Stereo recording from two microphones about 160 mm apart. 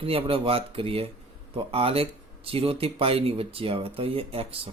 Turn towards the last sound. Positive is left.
turn(degrees=-35)  # may be behind; listen again after turning